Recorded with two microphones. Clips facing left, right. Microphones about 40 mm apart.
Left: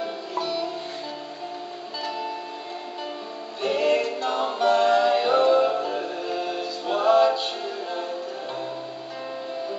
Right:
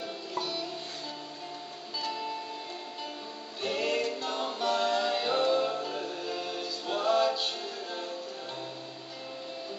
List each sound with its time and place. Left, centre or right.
0.0 s music: centre
3.6 s music: centre